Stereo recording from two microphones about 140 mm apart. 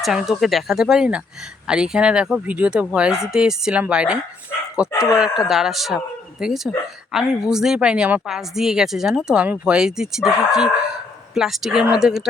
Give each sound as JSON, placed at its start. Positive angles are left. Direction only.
{"t": 0.0, "sound": "a woman's voice", "side_deg": -5}
{"t": 4.9, "sound": "speech", "side_deg": 25}
{"t": 5.5, "sound": "a woman's voice", "side_deg": 0}